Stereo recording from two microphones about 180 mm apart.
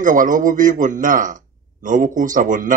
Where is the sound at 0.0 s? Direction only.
45° right (ahead or behind).